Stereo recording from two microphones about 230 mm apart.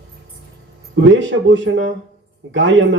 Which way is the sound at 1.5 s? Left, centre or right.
Right.